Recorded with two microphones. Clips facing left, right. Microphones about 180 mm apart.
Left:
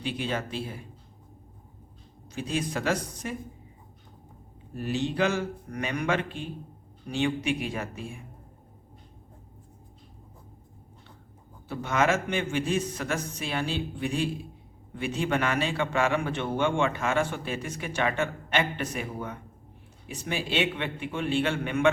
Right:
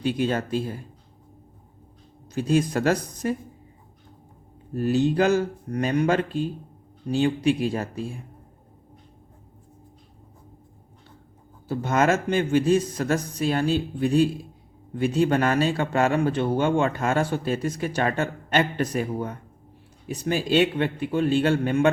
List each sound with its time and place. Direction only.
0.0 s speech: 45° right (ahead or behind)
2.3 s speech: 45° right (ahead or behind)
4.7 s a man's voice: 40° right (ahead or behind)
11.7 s a man's voice: 40° right (ahead or behind)